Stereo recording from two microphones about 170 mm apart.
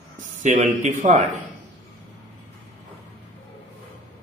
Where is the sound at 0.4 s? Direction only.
50° right (ahead or behind).